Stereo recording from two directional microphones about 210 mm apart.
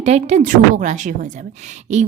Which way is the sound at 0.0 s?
30° right (ahead or behind).